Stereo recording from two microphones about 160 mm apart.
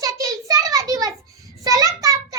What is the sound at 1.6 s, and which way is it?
Child singing, 25° right (ahead or behind).